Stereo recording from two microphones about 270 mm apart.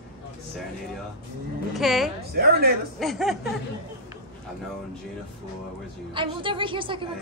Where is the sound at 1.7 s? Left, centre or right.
Centre.